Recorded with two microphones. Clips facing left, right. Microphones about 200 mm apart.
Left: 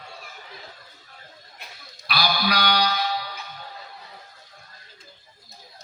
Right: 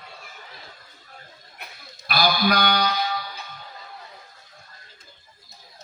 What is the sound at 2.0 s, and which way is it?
Sheep, 50° right (ahead or behind).